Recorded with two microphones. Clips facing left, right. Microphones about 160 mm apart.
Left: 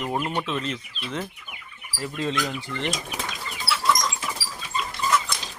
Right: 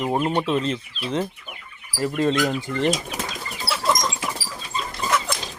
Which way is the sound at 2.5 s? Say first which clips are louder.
Right 7 dB; 45° right (ahead or behind).